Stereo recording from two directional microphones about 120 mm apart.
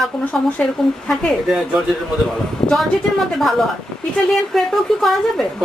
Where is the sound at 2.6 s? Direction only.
50° left (ahead or behind).